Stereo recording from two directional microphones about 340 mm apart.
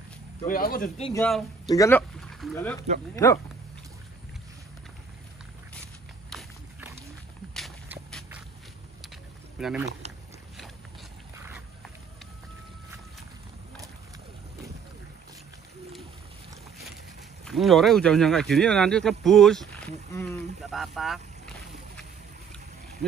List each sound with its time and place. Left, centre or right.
0.4 s speech: left
1.2 s speech: centre
6.3 s walk: centre
9.6 s speech: centre
11.3 s a sound: centre
17.5 s speech: centre